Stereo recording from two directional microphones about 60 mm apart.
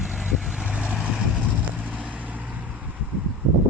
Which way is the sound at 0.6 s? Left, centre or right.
Centre.